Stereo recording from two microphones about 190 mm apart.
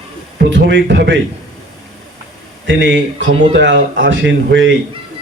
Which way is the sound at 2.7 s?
70° right (ahead or behind).